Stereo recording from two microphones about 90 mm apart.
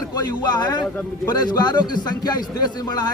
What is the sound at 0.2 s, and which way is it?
Speech, 50° left (ahead or behind).